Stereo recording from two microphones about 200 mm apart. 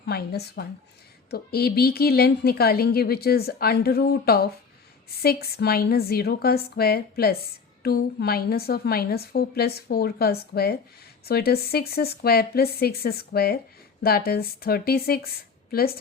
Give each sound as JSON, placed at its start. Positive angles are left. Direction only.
{"t": 0.0, "sound": "a woman's voice", "side_deg": 50}